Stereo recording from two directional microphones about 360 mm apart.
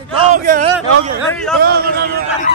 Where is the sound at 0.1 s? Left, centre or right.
Right.